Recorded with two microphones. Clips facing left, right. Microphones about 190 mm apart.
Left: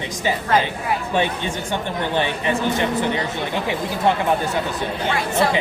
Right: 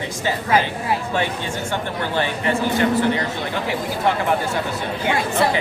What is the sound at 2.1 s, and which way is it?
Speech, 20° left (ahead or behind).